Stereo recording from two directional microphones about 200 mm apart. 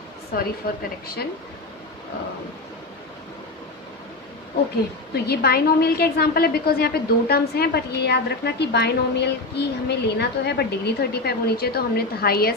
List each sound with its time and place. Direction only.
0.3 s a woman's voice: 50° left (ahead or behind)
5.1 s a woman's voice: 55° left (ahead or behind)